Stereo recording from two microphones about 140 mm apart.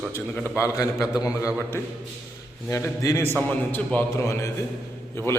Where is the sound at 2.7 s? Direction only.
20° left (ahead or behind).